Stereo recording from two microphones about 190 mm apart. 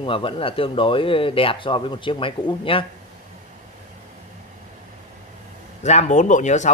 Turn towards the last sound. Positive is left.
turn(degrees=40)  # may be behind; listen again after turning